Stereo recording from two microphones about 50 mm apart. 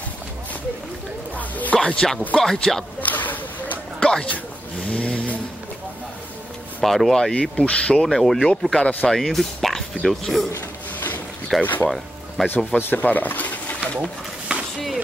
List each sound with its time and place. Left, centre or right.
1.3 s speech: left
1.8 s speech: centre
3.0 s a sound: left
4.0 s speech: centre
4.8 s vehicle: left
6.8 s speech: centre
7.5 s speech: left
7.9 s speech: centre
8.7 s speech: centre
9.1 s speech: centre
11.6 s speech: left
12.4 s speech: centre
12.9 s speech: left
14.5 s a sound: right